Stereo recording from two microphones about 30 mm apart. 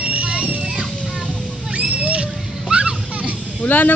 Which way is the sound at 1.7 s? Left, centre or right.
Right.